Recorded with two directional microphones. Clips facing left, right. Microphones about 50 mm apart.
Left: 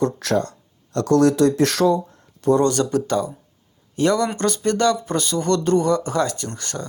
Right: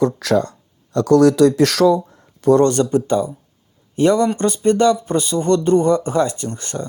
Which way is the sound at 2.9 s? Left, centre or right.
Right.